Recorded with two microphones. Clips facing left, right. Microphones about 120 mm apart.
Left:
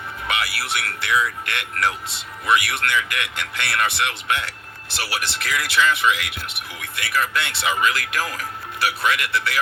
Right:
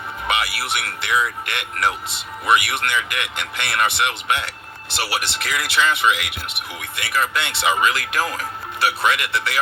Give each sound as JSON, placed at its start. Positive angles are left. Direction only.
{"t": 0.3, "sound": "speech", "side_deg": -20}